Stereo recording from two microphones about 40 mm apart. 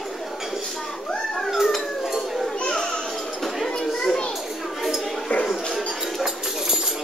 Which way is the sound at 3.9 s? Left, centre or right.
Centre.